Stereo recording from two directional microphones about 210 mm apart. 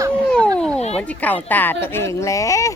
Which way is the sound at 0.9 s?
5° left (ahead or behind).